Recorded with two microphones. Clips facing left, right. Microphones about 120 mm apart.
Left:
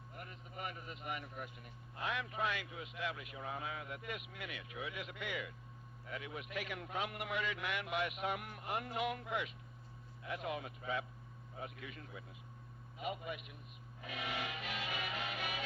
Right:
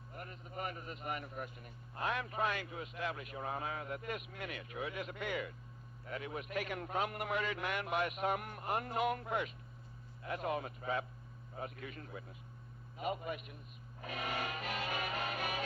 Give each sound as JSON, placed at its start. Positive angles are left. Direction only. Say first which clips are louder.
{"t": 0.1, "sound": "a man's voice", "louder": "right 4 dB", "side_deg": -45}